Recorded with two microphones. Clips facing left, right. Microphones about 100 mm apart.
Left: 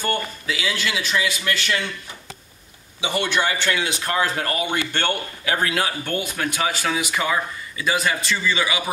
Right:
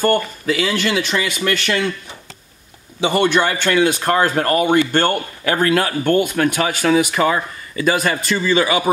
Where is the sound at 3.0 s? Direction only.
50° right (ahead or behind).